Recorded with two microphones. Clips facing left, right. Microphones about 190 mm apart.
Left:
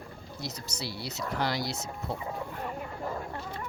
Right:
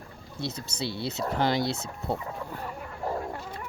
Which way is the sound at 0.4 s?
30° right (ahead or behind).